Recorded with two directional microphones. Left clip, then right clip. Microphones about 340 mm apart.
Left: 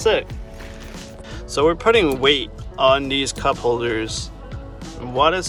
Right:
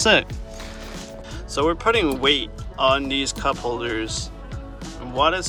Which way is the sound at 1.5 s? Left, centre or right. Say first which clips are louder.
Left 4 dB; centre.